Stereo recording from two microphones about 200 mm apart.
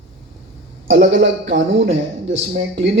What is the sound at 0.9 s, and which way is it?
A man's voice, 65° right (ahead or behind).